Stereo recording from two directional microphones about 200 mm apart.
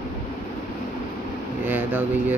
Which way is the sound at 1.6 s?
10° right (ahead or behind).